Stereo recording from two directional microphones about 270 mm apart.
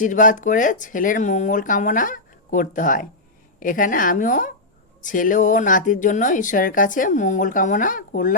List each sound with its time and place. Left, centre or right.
0.0 s speech: left